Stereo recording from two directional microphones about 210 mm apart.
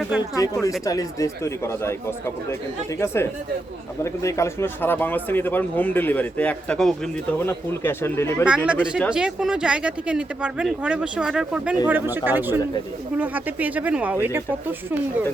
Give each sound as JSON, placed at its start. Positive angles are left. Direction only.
{"t": 0.2, "sound": "speech", "side_deg": 15}
{"t": 8.4, "sound": "speech", "side_deg": -5}